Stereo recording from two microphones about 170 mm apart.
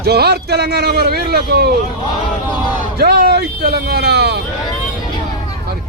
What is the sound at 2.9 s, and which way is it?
Speech, 70° right (ahead or behind).